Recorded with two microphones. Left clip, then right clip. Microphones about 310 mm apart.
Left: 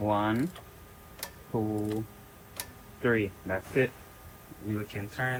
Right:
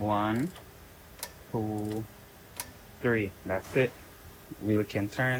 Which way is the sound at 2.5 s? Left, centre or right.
Centre.